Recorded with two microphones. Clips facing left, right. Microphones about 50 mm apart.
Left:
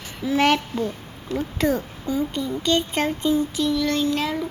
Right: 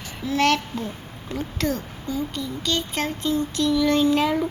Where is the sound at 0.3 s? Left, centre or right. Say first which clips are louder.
Left 1 dB; centre.